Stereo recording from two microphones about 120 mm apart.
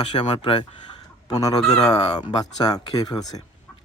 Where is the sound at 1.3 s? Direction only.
30° left (ahead or behind).